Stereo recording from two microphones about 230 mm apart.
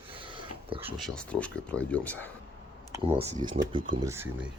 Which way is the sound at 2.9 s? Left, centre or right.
Right.